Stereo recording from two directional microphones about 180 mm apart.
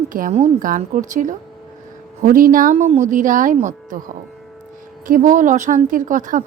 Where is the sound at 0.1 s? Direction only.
45° right (ahead or behind).